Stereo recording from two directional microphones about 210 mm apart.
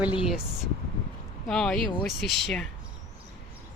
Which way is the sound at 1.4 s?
Centre (ahead or behind).